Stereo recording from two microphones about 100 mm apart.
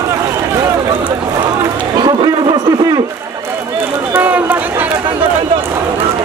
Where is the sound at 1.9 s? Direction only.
45° right (ahead or behind).